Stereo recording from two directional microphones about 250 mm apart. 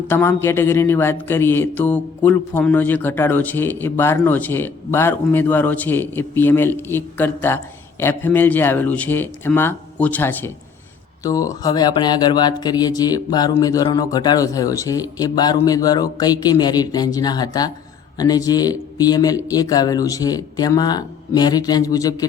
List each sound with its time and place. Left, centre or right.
0.1 s speech: centre